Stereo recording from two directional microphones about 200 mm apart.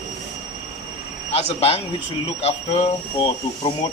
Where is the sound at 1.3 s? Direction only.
30° left (ahead or behind).